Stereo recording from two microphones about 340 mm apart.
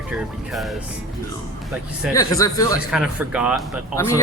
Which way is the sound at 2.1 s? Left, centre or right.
Centre.